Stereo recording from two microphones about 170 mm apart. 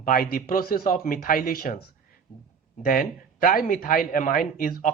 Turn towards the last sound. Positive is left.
turn(degrees=55)  # may be behind; listen again after turning